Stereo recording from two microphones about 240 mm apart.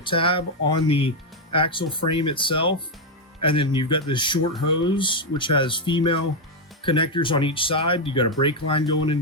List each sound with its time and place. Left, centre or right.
0.0 s speech: left